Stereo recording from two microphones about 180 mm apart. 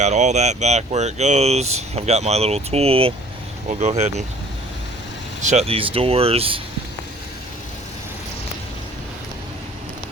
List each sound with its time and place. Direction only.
0.0 s speech: 40° right (ahead or behind)
5.4 s speech: 40° right (ahead or behind)